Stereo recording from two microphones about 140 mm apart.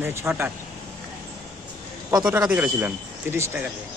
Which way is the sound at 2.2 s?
10° right (ahead or behind).